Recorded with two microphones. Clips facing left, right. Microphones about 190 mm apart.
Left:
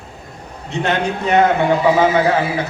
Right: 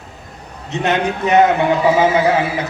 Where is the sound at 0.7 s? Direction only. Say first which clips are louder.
Right 1 dB; 20° right (ahead or behind).